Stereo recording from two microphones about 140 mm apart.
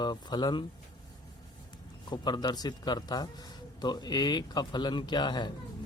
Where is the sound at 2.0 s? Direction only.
30° left (ahead or behind).